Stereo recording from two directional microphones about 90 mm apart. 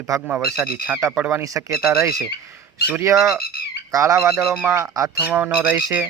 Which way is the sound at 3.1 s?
35° right (ahead or behind).